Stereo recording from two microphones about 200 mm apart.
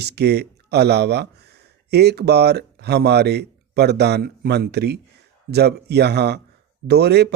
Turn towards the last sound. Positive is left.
turn(degrees=-55)  # may be behind; listen again after turning